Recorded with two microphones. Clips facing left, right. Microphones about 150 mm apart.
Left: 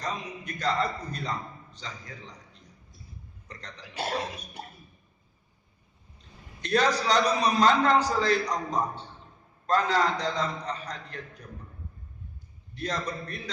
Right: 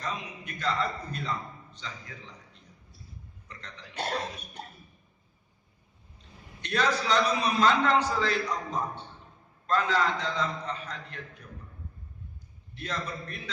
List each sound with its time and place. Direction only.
0.0 s a man's voice: 40° left (ahead or behind)
3.5 s a man's voice: 35° left (ahead or behind)
3.9 s speech: 5° left (ahead or behind)
6.6 s a man's voice: 40° left (ahead or behind)
12.7 s a man's voice: 40° left (ahead or behind)